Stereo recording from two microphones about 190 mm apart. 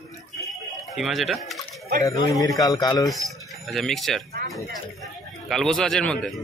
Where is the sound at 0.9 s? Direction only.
Centre (ahead or behind).